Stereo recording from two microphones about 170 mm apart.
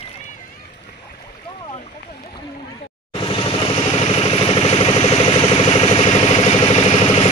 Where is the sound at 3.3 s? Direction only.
30° left (ahead or behind).